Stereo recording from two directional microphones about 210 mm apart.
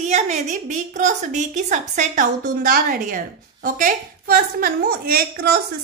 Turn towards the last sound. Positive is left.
turn(degrees=-45)  # may be behind; listen again after turning